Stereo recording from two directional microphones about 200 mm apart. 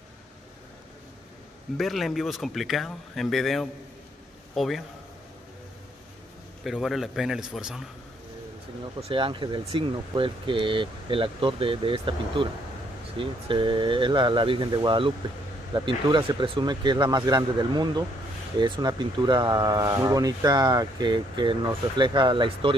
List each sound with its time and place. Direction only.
1.8 s speech: centre (ahead or behind)
6.6 s speech: centre (ahead or behind)
9.0 s speech: 25° right (ahead or behind)